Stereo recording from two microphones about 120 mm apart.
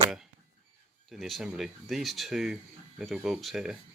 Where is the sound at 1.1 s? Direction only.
Centre (ahead or behind).